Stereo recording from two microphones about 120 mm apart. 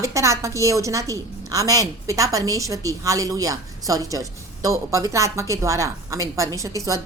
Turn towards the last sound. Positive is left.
turn(degrees=-25)  # may be behind; listen again after turning